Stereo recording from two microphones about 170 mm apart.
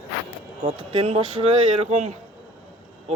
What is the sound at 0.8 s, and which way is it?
Speech, 35° right (ahead or behind).